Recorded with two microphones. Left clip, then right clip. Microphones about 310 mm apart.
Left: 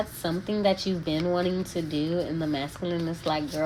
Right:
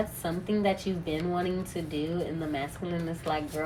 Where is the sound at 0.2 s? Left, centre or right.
Left.